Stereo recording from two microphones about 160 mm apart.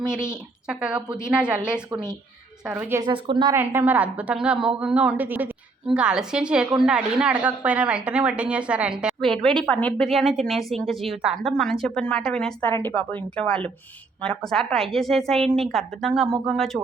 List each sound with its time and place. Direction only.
0.7 s a woman's voice: 5° right (ahead or behind)
3.0 s a woman's voice: 30° right (ahead or behind)
3.5 s a woman's voice: 15° right (ahead or behind); by 16.8 s 5° left (ahead or behind)